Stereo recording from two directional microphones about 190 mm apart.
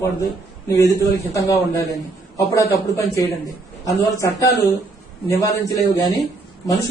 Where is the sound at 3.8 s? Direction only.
15° left (ahead or behind).